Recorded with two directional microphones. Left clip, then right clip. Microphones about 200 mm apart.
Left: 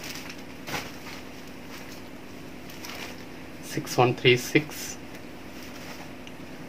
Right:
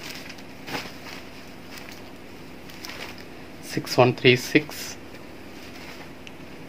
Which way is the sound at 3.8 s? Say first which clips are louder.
Right 3 dB; 45° right (ahead or behind).